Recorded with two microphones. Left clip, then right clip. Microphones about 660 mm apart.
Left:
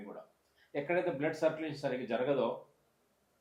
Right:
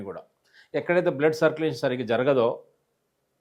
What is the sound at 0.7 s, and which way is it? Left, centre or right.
Speech, right.